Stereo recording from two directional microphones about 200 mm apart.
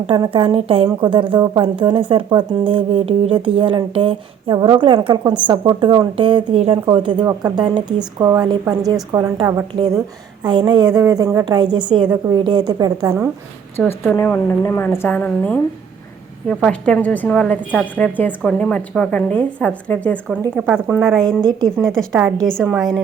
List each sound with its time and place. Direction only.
0.1 s a woman's voice: 25° right (ahead or behind)
14.0 s a woman's voice: 5° left (ahead or behind)
20.6 s a woman's voice: 5° right (ahead or behind)